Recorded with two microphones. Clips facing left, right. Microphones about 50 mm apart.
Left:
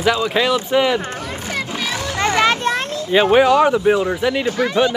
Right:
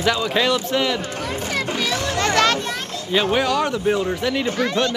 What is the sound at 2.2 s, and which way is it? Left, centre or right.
Children playing, centre.